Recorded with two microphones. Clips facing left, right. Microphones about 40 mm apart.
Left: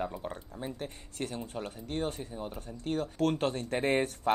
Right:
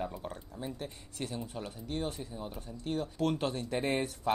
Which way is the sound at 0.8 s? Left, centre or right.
Left.